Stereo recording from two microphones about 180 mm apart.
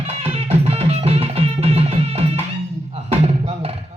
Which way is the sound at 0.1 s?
35° right (ahead or behind).